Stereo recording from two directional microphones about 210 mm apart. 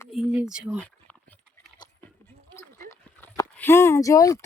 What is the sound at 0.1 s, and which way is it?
Speech, centre (ahead or behind).